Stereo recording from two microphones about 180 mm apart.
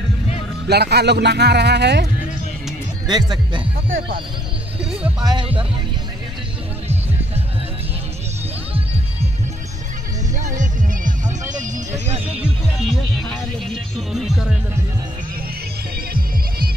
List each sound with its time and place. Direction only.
0.7 s speech: 65° right (ahead or behind)
3.1 s speech: 25° right (ahead or behind)
5.2 s speech: 25° right (ahead or behind)
10.6 s music: 45° right (ahead or behind)
13.9 s speech: centre (ahead or behind)
16.1 s music: 55° right (ahead or behind)